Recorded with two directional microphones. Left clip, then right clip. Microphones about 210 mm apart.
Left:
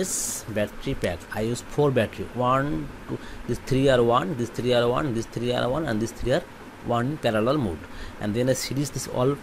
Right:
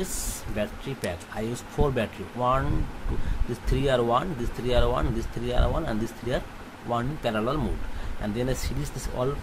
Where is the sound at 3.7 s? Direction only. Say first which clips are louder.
Left 4 dB; 20° left (ahead or behind).